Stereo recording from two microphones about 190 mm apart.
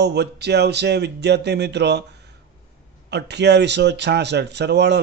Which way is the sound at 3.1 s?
65° right (ahead or behind).